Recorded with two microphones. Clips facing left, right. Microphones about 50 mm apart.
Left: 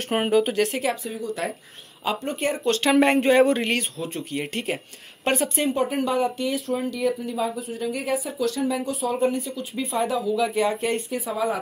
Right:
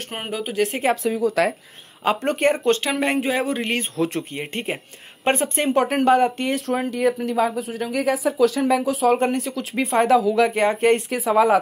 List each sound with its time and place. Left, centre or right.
0.3 s speech: centre
1.0 s speech: right
2.0 s speech: right
2.8 s speech: centre
4.0 s speech: right
4.4 s speech: right
5.8 s speech: right
7.0 s speech: right
10.5 s speech: right
11.1 s speech: right